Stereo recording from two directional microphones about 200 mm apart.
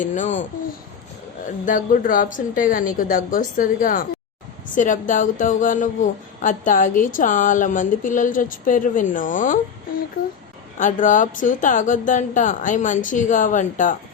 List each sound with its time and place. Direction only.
0.0 s speech: 35° left (ahead or behind)
1.6 s speech: 40° left (ahead or behind)